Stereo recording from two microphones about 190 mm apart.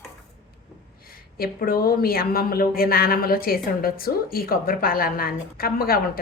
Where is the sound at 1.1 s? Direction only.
50° left (ahead or behind).